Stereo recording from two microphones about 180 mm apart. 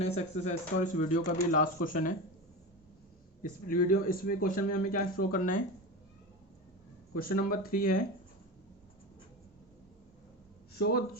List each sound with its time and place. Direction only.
0.0 s speech: 35° left (ahead or behind)
3.7 s speech: 50° left (ahead or behind)
7.1 s speech: 55° left (ahead or behind)
10.8 s speech: 60° left (ahead or behind)